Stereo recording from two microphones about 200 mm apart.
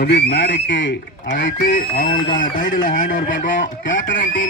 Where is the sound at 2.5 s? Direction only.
45° left (ahead or behind).